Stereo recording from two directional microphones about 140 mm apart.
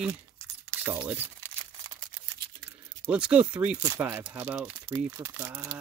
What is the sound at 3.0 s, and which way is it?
Speech, 10° right (ahead or behind).